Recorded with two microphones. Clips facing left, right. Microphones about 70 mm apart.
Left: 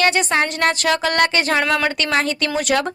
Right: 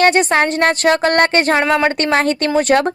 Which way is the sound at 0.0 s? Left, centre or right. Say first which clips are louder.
Right 5 dB; right.